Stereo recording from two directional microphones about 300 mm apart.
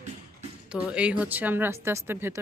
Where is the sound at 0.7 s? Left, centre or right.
Centre.